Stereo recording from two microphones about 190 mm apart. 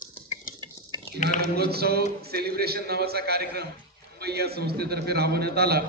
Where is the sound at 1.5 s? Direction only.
55° right (ahead or behind).